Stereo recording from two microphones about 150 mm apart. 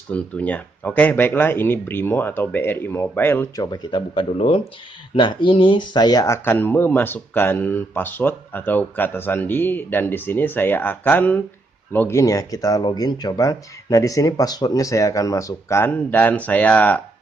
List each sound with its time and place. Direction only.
0.1 s speech: 10° left (ahead or behind)
3.5 s speech: 30° left (ahead or behind); by 17.0 s 10° left (ahead or behind)